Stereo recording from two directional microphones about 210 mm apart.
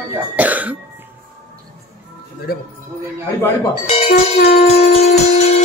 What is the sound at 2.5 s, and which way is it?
Speech, 45° left (ahead or behind).